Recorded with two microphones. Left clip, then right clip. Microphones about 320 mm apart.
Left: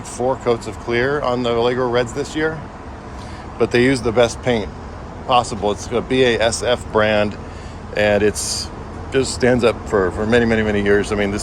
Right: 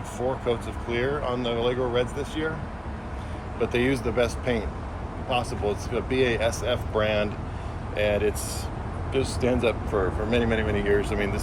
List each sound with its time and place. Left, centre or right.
0.3 s speech: left
3.6 s speech: left
10.5 s speech: left
10.8 s speech: left